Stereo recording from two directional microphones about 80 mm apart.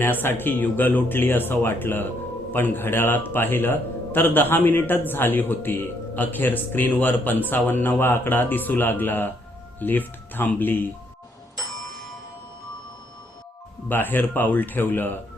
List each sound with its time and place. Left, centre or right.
0.0 s speech: left
13.8 s speech: left